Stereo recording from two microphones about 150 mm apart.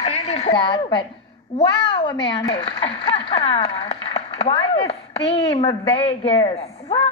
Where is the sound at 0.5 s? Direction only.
30° left (ahead or behind).